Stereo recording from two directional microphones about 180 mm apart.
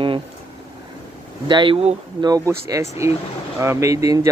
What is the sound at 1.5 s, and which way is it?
Speech, 25° right (ahead or behind).